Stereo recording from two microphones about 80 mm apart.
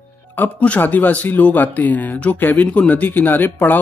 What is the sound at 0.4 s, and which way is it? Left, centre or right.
Speech, left.